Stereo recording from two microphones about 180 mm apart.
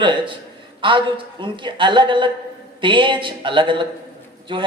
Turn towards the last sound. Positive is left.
turn(degrees=-25)  # may be behind; listen again after turning